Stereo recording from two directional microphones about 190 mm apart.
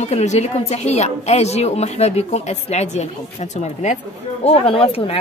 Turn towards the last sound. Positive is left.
turn(degrees=30)  # may be behind; listen again after turning